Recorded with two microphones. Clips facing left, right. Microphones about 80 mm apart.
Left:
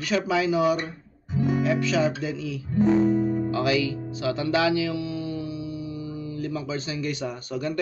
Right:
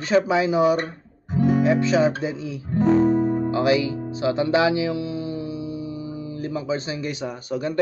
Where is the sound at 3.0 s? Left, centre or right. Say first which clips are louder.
Right 3 dB; right.